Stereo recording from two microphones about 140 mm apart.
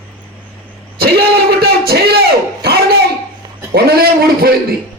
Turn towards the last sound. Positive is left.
turn(degrees=-90)